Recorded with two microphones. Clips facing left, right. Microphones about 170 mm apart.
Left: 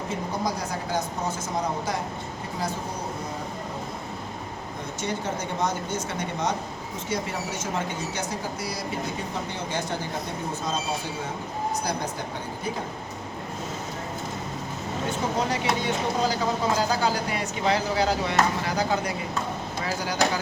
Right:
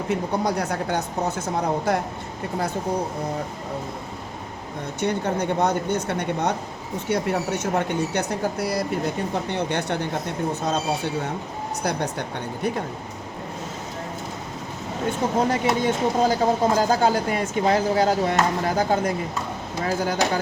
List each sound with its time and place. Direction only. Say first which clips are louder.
0.1 s speech: right 6 dB; 70° right (ahead or behind)
4.9 s speech: right 7 dB; 60° right (ahead or behind)
11.8 s speech: right 4 dB; 65° right (ahead or behind)
15.4 s speech: right 5 dB; 45° right (ahead or behind)